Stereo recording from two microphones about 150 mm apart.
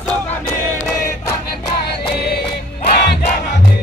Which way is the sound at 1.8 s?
90° left.